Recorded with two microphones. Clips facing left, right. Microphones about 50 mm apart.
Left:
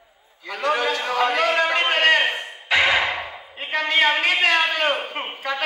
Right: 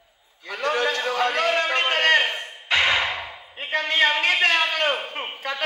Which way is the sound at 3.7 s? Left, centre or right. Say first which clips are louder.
Left 1 dB; left.